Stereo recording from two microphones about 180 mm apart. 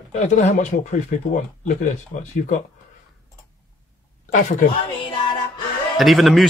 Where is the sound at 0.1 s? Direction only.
40° left (ahead or behind).